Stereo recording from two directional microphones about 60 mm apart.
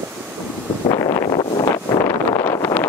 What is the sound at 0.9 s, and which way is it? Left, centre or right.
Wind noise, left.